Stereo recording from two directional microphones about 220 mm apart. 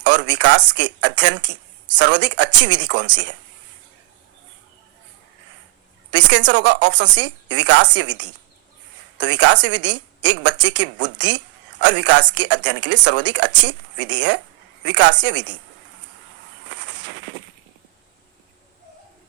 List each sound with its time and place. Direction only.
0.0 s a woman's voice: 55° right (ahead or behind)
6.1 s a woman's voice: 55° right (ahead or behind)
9.1 s a woman's voice: 55° right (ahead or behind)
16.6 s a sound: 55° right (ahead or behind)